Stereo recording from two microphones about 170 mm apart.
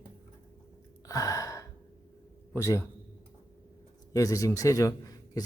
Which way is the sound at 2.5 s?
15° left (ahead or behind).